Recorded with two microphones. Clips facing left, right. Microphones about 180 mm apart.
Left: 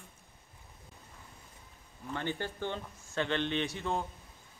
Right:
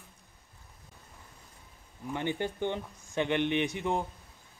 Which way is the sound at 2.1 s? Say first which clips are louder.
Right 4 dB; 15° right (ahead or behind).